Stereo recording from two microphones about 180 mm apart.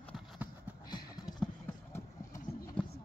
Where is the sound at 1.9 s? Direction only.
15° left (ahead or behind).